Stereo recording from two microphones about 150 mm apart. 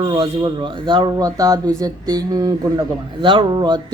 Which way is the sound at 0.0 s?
35° right (ahead or behind).